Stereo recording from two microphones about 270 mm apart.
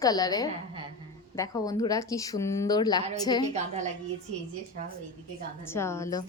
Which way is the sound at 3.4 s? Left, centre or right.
Right.